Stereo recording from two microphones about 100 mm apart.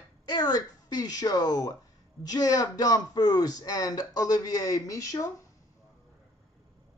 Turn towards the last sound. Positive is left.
turn(degrees=35)  # may be behind; listen again after turning